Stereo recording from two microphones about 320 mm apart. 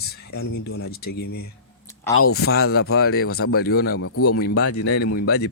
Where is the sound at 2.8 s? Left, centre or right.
Left.